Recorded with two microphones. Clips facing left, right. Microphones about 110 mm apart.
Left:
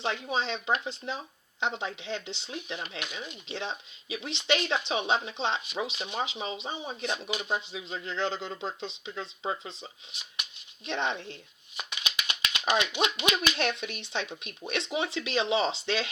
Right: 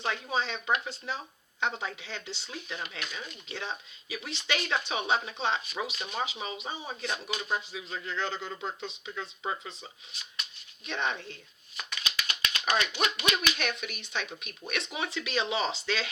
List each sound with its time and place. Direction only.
0.0 s speech: 25° left (ahead or behind)
10.8 s speech: 30° left (ahead or behind)